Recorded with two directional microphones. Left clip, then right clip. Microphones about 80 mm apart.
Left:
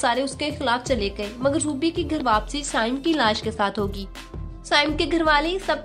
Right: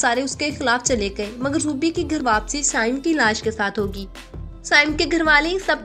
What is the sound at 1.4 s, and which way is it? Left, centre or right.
A woman's voice, right.